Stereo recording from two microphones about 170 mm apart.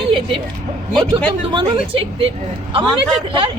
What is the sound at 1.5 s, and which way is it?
Speech, 30° right (ahead or behind).